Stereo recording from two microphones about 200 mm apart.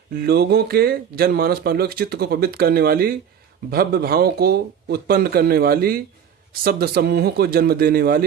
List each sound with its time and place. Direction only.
0.2 s speech: 50° right (ahead or behind)